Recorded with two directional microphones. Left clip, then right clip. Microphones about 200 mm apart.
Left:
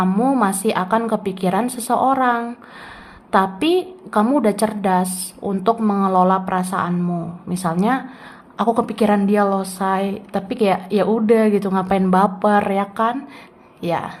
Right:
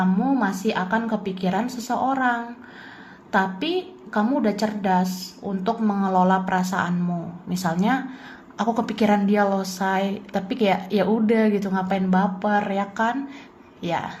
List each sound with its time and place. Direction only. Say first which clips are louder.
0.0 s a woman's voice: left 5 dB; 25° left (ahead or behind)